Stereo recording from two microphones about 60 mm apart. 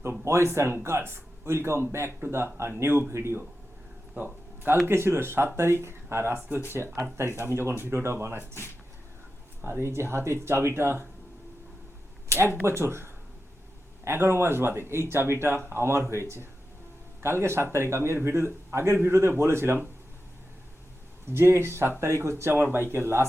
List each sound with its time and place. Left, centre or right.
0.3 s speech: right
4.9 s speech: right
9.6 s speech: right
12.6 s speech: right
21.3 s speech: right
22.0 s speech: right